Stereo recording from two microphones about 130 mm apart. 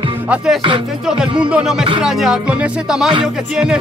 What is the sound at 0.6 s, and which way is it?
Music, 40° right (ahead or behind).